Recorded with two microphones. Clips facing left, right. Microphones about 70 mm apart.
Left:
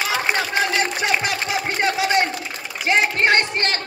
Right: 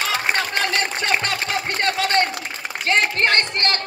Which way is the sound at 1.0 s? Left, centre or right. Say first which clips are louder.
Left 1 dB; centre.